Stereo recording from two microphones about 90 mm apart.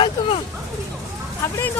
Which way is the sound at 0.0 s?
65° left (ahead or behind).